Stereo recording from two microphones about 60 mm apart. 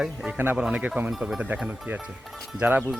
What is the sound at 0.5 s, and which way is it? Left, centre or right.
Speech, centre.